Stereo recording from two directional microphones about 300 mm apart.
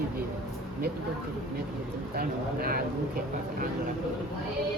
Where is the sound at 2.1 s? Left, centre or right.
Right.